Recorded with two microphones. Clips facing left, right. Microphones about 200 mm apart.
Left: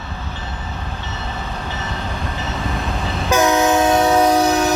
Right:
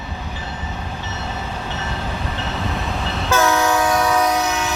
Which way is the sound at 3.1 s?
15° left (ahead or behind).